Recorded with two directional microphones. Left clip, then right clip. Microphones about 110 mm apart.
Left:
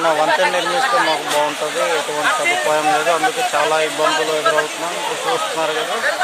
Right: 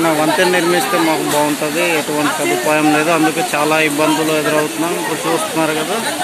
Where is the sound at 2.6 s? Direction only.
Centre (ahead or behind).